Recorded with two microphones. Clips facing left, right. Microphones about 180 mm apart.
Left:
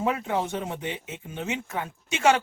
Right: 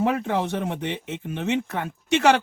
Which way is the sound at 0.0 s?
70° right (ahead or behind).